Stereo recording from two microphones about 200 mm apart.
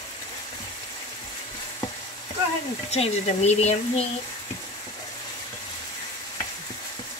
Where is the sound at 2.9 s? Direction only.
30° left (ahead or behind).